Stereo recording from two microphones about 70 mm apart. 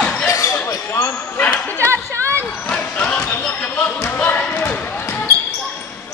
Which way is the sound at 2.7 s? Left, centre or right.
Centre.